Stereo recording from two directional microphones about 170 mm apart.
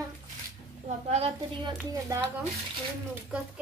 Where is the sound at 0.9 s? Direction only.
40° right (ahead or behind).